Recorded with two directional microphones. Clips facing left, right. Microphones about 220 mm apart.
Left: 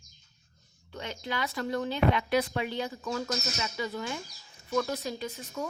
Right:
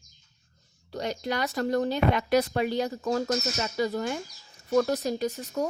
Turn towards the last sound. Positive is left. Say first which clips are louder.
# right 7 dB
turn(degrees=-45)  # may be behind; listen again after turning